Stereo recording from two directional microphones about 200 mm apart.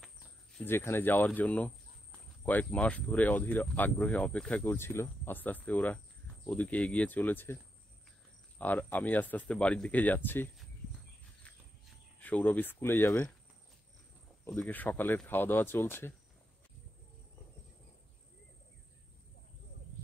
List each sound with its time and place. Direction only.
0.0 s speech: 5° left (ahead or behind)
8.5 s speech: 10° left (ahead or behind)
11.4 s a sound: 5° left (ahead or behind)
14.4 s speech: 5° left (ahead or behind)